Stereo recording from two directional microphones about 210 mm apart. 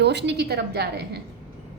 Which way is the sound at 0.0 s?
55° right (ahead or behind).